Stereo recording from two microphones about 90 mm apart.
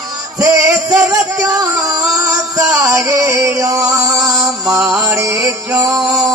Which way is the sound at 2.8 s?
40° right (ahead or behind).